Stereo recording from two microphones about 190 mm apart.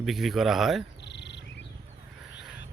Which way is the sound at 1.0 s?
65° left (ahead or behind).